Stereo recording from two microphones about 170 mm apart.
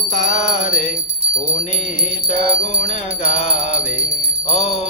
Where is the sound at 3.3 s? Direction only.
40° left (ahead or behind).